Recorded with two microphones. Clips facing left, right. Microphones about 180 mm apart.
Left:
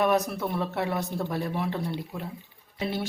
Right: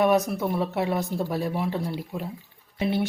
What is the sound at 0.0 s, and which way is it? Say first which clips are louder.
Speech: right 3 dB; 15° right (ahead or behind).